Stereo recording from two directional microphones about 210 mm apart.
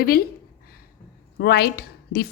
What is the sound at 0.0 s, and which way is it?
Speech, 45° left (ahead or behind).